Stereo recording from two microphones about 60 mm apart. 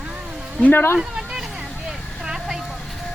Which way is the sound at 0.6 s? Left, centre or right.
Left.